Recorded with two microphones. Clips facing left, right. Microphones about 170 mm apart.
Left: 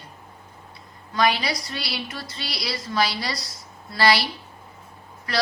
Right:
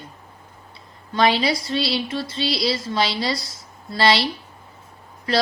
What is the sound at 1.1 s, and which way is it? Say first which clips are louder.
Speech: right 4 dB; 25° right (ahead or behind).